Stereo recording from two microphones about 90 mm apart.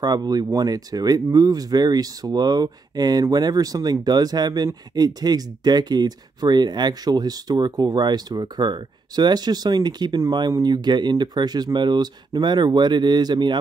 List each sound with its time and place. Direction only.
0.0 s speech: 50° right (ahead or behind)